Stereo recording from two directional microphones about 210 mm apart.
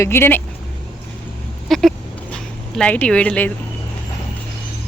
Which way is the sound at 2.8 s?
5° left (ahead or behind).